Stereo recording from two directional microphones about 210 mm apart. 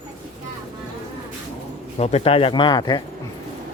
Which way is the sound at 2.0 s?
30° left (ahead or behind).